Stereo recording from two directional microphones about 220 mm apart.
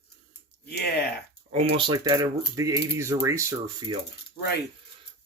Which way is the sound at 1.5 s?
25° right (ahead or behind).